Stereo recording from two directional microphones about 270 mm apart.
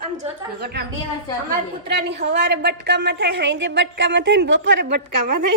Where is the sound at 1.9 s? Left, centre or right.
Right.